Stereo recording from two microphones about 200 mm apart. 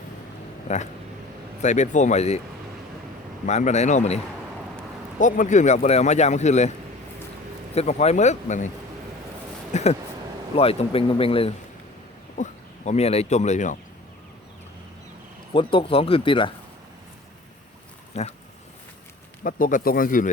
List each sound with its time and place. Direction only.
1.6 s speech: 35° left (ahead or behind)
3.4 s speech: 35° left (ahead or behind)
5.2 s speech: 40° left (ahead or behind)
7.8 s speech: 35° left (ahead or behind)
9.7 s speech: 35° left (ahead or behind)
15.5 s speech: 25° left (ahead or behind)
18.1 s speech: 35° left (ahead or behind)
19.4 s speech: 45° left (ahead or behind)